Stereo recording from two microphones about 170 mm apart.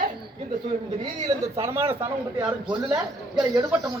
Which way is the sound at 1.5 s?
15° right (ahead or behind).